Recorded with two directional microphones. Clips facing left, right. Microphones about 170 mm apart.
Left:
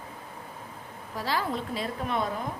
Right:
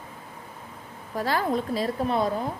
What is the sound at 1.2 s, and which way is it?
A woman's voice, 50° right (ahead or behind).